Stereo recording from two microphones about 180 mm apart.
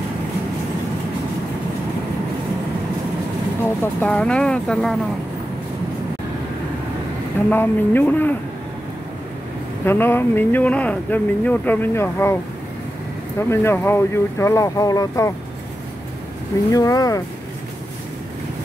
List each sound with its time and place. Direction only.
3.6 s speech: 10° left (ahead or behind)
7.4 s speech: 10° left (ahead or behind)
9.8 s speech: 10° left (ahead or behind)
13.5 s speech: 15° left (ahead or behind)
16.7 s speech: 20° left (ahead or behind)